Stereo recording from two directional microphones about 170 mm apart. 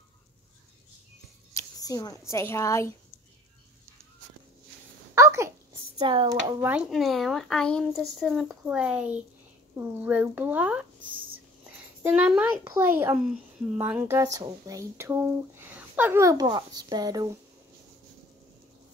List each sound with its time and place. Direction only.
1.5 s speech: 20° left (ahead or behind)
5.1 s a sound: 15° right (ahead or behind)
5.9 s speech: 25° right (ahead or behind)
6.7 s a child's voice: 5° right (ahead or behind); by 17.3 s 25° right (ahead or behind)